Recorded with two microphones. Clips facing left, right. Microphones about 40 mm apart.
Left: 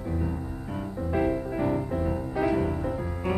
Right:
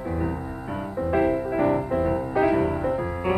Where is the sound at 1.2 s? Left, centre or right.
Centre.